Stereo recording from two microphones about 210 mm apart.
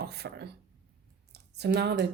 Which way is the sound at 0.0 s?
50° right (ahead or behind).